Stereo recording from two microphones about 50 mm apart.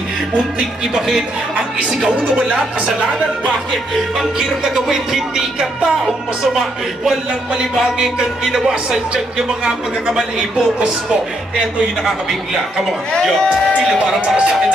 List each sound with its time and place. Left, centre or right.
0.3 s music: centre
2.0 s speech: right
3.7 s music: centre
7.7 s music: centre
13.2 s a man's voice: centre
13.9 s speech: right